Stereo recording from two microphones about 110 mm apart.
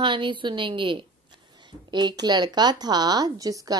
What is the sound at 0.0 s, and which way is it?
Speech, 45° right (ahead or behind).